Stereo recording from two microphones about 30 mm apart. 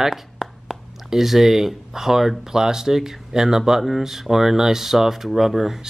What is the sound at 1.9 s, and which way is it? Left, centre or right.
Speech, centre.